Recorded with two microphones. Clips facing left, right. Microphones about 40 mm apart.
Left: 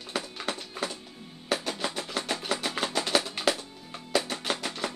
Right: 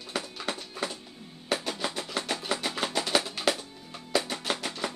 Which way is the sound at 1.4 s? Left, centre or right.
Centre.